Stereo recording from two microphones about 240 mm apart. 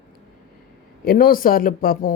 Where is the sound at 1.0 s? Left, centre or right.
Left.